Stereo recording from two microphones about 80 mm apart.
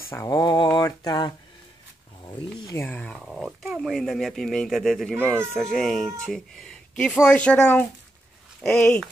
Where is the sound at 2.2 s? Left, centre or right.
Left.